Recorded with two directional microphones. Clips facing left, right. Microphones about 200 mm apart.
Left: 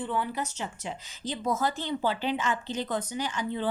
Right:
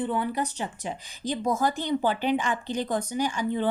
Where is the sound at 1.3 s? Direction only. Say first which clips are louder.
Right 3 dB; 10° right (ahead or behind).